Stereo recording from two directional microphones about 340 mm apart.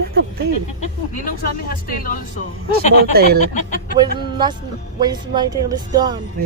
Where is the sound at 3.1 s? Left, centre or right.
Right.